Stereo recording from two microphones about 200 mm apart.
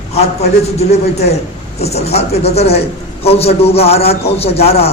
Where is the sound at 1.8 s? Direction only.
30° left (ahead or behind).